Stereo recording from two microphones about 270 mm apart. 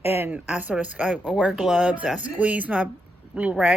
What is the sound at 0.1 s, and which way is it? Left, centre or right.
Speech, centre.